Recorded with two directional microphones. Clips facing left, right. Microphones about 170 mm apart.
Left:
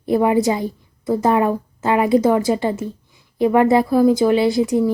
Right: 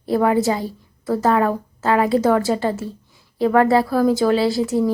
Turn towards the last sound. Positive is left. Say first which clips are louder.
# left 2 dB
turn(degrees=20)  # may be behind; listen again after turning